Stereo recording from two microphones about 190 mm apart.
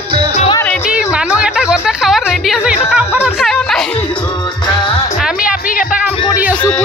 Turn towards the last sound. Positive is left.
turn(degrees=-5)  # may be behind; listen again after turning